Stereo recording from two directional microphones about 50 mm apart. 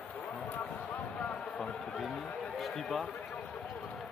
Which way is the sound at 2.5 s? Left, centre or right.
Centre.